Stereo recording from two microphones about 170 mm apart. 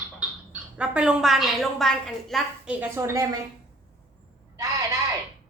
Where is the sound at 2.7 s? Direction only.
15° right (ahead or behind).